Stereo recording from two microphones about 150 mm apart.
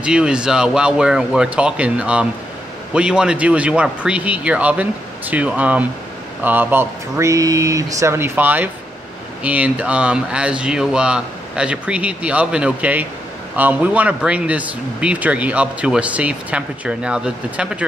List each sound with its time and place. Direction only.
0.0 s speech: 5° right (ahead or behind)